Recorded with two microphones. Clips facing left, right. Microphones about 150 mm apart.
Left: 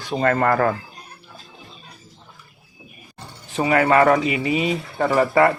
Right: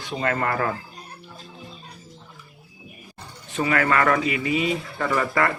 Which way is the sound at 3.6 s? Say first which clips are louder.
Left 5 dB; 30° left (ahead or behind).